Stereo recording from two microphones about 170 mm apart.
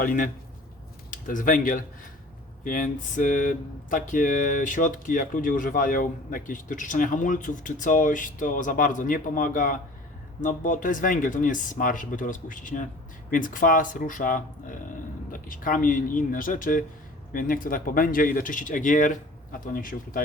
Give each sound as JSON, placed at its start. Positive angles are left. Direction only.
{"t": 0.0, "sound": "speech", "side_deg": 55}